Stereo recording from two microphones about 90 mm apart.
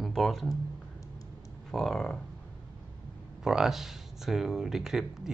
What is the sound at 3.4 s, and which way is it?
Speech, 5° right (ahead or behind).